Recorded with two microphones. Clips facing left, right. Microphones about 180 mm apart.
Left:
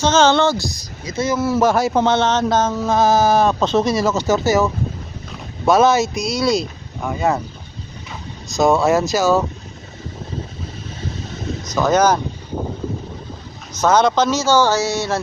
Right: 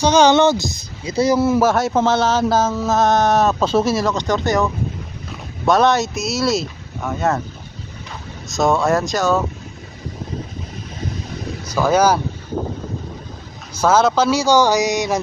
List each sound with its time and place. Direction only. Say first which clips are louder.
0.0 s speech: right 2 dB; 15° right (ahead or behind)
1.0 s speech: right 4 dB; 35° right (ahead or behind)
1.5 s a sound: even; centre (ahead or behind)
8.4 s a sound: left 2 dB; centre (ahead or behind)
11.7 s speech: even; 10° right (ahead or behind)
13.8 s speech: even; 5° right (ahead or behind)